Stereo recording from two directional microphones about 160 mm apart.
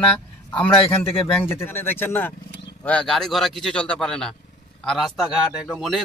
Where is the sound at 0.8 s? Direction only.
35° left (ahead or behind).